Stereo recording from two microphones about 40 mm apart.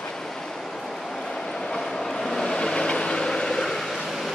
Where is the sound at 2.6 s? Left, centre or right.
Left; by 4.3 s centre.